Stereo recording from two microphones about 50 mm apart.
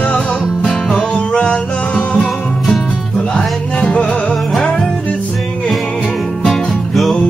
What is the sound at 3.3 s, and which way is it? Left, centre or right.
Music, left.